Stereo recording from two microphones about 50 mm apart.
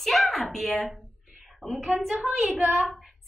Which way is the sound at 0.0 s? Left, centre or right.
Centre.